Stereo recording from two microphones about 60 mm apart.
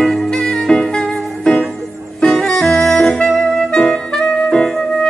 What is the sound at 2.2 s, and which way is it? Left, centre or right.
Saxophone, centre.